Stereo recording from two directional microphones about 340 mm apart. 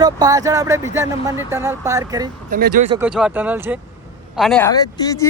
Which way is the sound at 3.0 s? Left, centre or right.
Centre.